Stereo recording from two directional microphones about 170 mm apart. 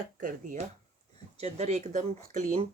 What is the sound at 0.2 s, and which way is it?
Speech, 50° right (ahead or behind).